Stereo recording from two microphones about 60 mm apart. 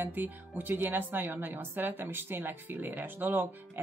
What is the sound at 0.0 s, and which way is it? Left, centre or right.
Speech, right.